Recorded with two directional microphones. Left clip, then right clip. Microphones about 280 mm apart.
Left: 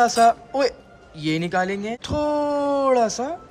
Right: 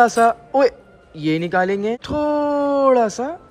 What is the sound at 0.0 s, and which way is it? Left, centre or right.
A man's voice, centre.